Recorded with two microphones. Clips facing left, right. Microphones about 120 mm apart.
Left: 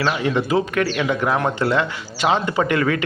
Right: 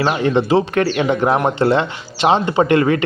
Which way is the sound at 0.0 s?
35° right (ahead or behind).